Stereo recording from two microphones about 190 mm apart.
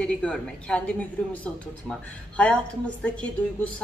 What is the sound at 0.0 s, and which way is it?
A woman's voice, 5° left (ahead or behind).